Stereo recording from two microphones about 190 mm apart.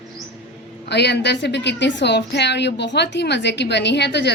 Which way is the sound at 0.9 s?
65° left (ahead or behind).